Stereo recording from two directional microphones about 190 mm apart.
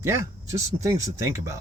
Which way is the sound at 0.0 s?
15° right (ahead or behind).